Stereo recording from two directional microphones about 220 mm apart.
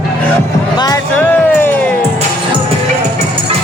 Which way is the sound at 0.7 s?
15° left (ahead or behind).